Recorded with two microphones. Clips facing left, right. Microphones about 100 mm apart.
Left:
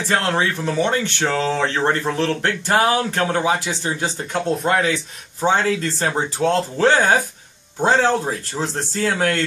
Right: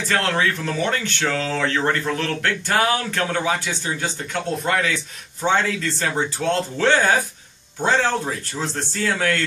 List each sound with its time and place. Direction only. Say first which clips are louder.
0.1 s speech: left 1 dB; 25° left (ahead or behind)